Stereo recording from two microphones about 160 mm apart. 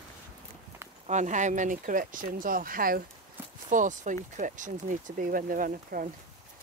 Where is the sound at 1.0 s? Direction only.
50° right (ahead or behind).